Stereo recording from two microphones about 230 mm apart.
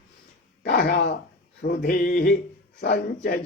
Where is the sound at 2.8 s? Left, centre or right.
Left.